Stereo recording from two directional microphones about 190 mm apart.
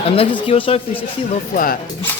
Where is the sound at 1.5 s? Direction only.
45° left (ahead or behind).